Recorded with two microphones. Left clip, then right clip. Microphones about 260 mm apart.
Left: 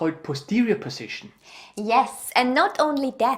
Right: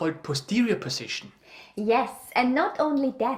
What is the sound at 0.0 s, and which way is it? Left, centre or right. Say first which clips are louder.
Speech: left 2 dB; right.